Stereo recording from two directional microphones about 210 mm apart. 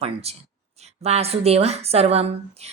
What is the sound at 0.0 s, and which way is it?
A woman's voice, 30° right (ahead or behind).